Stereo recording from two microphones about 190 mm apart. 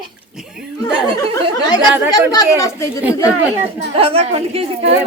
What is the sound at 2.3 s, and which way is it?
Speech, 15° left (ahead or behind).